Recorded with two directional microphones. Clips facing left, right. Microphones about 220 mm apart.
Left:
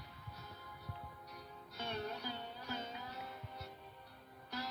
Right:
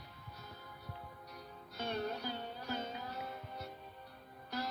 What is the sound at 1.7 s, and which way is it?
Music, 45° right (ahead or behind).